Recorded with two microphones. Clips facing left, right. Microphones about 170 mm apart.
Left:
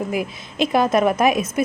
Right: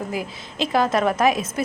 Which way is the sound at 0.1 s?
15° left (ahead or behind).